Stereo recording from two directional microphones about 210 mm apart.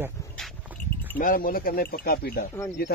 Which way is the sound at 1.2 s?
40° left (ahead or behind).